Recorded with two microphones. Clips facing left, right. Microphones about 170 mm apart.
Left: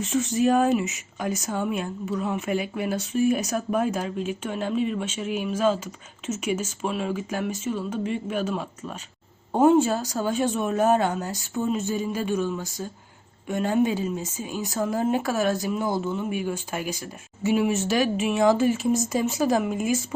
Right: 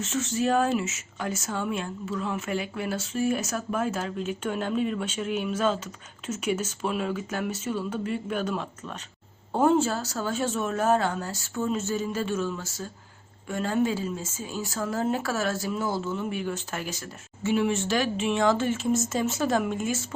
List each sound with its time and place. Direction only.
0.0 s speech: 15° left (ahead or behind)